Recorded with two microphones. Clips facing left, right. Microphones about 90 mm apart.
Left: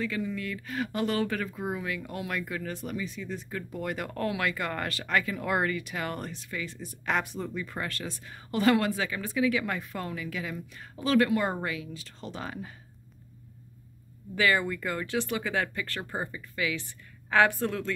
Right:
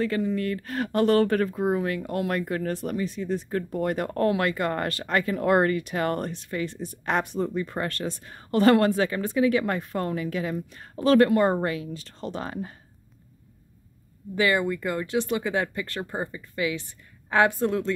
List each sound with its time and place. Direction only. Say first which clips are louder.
0.0 s speech: right 7 dB; 45° right (ahead or behind)
7.1 s speech: right 4 dB; 30° right (ahead or behind)
14.3 s speech: right 3 dB; 25° right (ahead or behind)